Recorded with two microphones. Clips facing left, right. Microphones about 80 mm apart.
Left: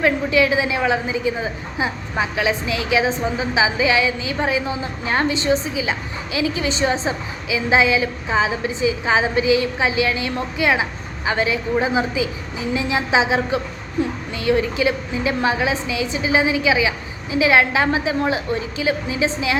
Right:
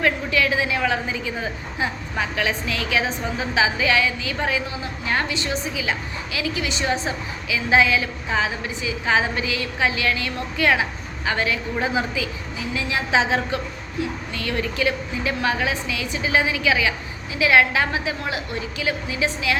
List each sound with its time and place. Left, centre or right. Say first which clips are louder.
0.0 s a woman's voice: left 4 dB; left
14.0 s a sound: left 5 dB; left
14.3 s a woman's voice: left 7 dB; left